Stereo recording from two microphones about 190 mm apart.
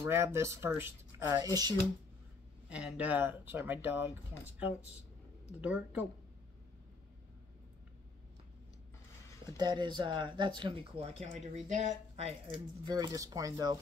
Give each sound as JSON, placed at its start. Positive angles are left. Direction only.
{"t": 0.0, "sound": "speech", "side_deg": -15}
{"t": 2.7, "sound": "speech", "side_deg": -5}
{"t": 5.6, "sound": "speech", "side_deg": -5}
{"t": 9.6, "sound": "speech", "side_deg": -20}
{"t": 12.8, "sound": "speech", "side_deg": -20}